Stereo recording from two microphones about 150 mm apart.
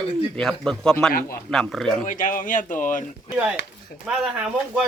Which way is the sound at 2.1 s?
60° left (ahead or behind).